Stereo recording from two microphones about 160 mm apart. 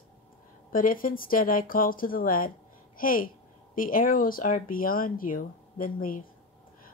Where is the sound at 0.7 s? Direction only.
60° left (ahead or behind).